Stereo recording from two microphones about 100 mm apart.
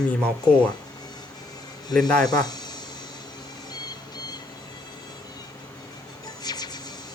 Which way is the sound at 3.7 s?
40° left (ahead or behind).